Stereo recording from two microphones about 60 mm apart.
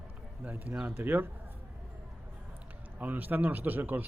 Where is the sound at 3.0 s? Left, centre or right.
Right.